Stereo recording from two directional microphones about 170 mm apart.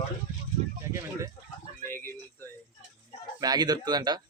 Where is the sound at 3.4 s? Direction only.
25° right (ahead or behind).